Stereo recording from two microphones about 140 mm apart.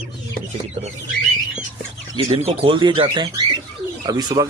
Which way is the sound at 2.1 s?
45° right (ahead or behind).